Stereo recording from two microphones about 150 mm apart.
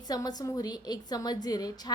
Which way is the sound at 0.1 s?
25° left (ahead or behind).